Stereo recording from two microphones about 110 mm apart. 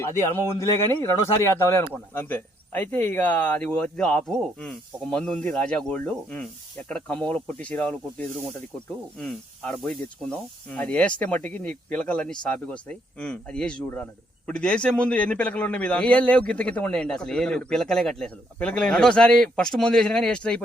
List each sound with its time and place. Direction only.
0.0 s speech: 25° left (ahead or behind)
9.6 s speech: 5° left (ahead or behind)